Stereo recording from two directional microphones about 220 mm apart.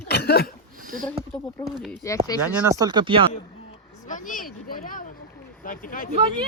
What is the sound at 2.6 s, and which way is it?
Speech, 15° right (ahead or behind).